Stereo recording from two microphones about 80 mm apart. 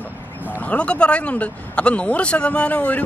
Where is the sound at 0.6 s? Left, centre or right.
Centre.